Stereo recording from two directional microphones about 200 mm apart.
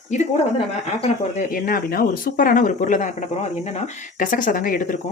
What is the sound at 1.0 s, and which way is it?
Speech, 35° left (ahead or behind).